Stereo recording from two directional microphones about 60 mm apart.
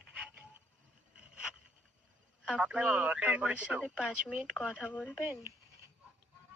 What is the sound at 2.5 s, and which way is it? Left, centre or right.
Speech, centre.